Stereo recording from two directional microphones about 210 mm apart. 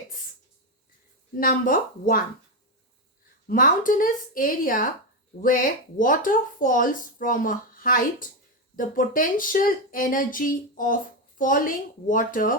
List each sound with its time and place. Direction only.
1.4 s speech: 40° left (ahead or behind)
3.4 s speech: 40° left (ahead or behind)
6.0 s speech: 40° left (ahead or behind)